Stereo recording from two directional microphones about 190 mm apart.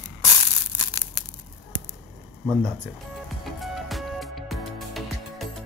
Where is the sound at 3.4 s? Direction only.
Centre (ahead or behind).